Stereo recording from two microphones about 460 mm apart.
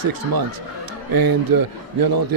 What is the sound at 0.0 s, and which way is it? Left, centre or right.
Speech, right.